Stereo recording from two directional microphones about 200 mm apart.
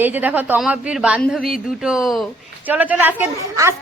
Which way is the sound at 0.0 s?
10° right (ahead or behind).